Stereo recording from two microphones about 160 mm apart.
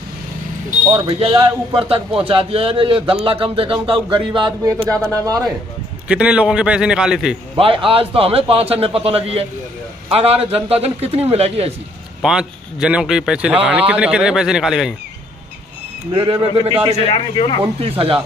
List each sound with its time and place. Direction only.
0.9 s a man's voice: 35° right (ahead or behind)
6.0 s speech: 5° right (ahead or behind)
7.5 s speech: 35° right (ahead or behind)
12.2 s speech: 5° right (ahead or behind)
16.1 s a man's voice: 30° right (ahead or behind)
17.1 s speech: 30° left (ahead or behind)
17.7 s speech: 35° right (ahead or behind)